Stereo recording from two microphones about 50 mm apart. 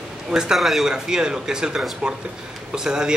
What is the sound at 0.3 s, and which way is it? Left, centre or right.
Speech, centre.